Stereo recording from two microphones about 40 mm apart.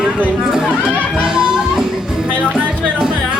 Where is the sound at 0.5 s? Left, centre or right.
Centre.